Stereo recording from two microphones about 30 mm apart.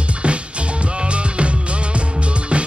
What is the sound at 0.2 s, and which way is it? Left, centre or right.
Music, right.